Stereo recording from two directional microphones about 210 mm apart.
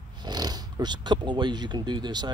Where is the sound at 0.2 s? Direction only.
20° right (ahead or behind).